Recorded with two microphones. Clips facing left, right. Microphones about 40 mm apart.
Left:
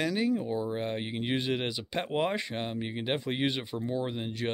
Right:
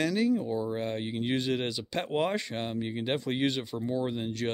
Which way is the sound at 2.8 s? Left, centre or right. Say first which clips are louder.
Right 2 dB; centre.